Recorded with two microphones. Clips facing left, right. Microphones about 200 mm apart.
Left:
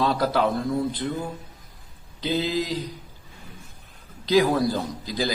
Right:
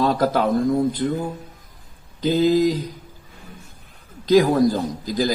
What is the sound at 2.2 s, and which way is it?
Speech, 45° right (ahead or behind).